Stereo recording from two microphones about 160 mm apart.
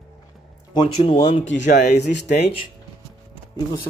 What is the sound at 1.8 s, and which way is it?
Speech, 90° left.